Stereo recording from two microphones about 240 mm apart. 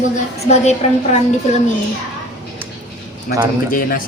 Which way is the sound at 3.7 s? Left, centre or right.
Left.